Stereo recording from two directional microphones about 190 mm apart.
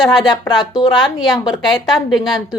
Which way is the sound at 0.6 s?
25° left (ahead or behind).